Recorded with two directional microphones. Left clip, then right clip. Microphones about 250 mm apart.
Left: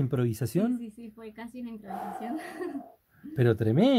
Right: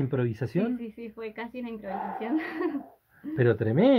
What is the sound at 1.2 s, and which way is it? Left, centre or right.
Speech, centre.